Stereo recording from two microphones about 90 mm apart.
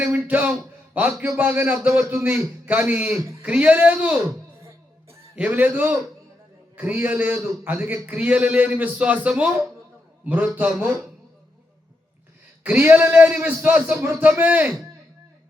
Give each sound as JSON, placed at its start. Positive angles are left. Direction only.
{"t": 0.0, "sound": "a sound", "side_deg": -15}
{"t": 1.2, "sound": "a man's voice", "side_deg": -20}
{"t": 5.4, "sound": "a man's voice", "side_deg": -20}
{"t": 12.6, "sound": "a man's voice", "side_deg": -15}